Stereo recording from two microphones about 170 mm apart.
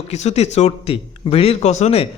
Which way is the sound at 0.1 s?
40° left (ahead or behind).